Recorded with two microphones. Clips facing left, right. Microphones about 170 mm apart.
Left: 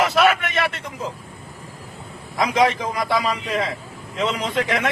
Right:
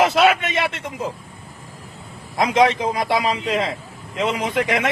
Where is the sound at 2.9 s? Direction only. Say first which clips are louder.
Right 2 dB; 20° right (ahead or behind).